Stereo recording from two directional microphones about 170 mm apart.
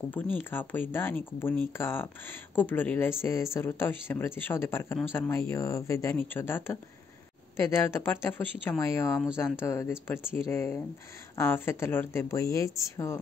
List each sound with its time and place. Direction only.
0.1 s speech: 10° left (ahead or behind)